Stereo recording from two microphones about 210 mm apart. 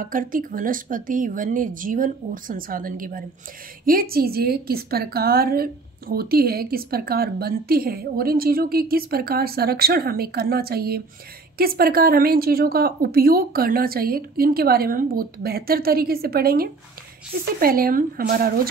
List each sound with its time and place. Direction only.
0.0 s a woman's voice: 40° right (ahead or behind)